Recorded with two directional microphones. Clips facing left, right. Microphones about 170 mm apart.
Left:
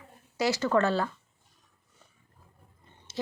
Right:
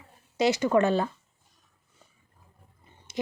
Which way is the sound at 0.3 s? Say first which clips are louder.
Right 3 dB; 20° right (ahead or behind).